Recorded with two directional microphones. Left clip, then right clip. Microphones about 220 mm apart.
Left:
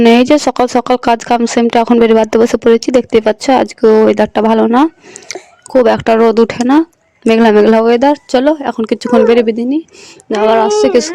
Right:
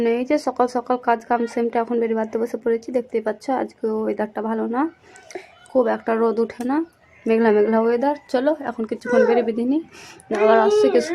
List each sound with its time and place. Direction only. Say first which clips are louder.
0.0 s speech: left 12 dB; 45° left (ahead or behind)